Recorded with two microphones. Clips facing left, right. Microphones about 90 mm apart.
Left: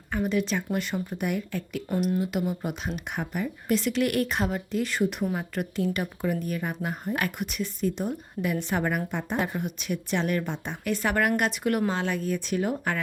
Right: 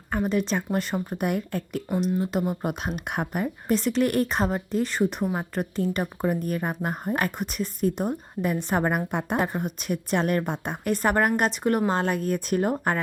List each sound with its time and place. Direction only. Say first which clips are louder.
0.1 s speech: right 2 dB; 40° right (ahead or behind)
2.0 s speech: right 1 dB; 30° right (ahead or behind); by 3.5 s 50° right (ahead or behind)
3.7 s speech: right 2 dB; 35° right (ahead or behind)
9.1 s speech: right 3 dB; 55° right (ahead or behind)
9.5 s speech: right 2 dB; 40° right (ahead or behind)